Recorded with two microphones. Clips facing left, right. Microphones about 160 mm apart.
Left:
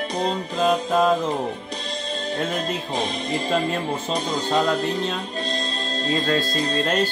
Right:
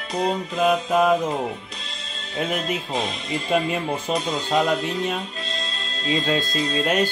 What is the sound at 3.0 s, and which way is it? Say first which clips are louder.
Speech: left 2 dB; 40° left (ahead or behind).